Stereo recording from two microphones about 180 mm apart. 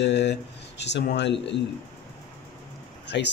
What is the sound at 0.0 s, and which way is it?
Speech, 75° left (ahead or behind).